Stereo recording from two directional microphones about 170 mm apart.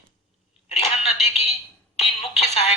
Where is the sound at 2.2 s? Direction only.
40° left (ahead or behind).